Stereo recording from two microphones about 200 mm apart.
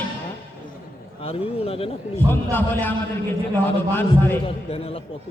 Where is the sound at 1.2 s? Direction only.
30° left (ahead or behind).